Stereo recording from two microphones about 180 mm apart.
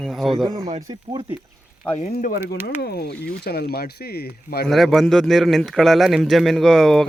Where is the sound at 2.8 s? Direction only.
60° left (ahead or behind).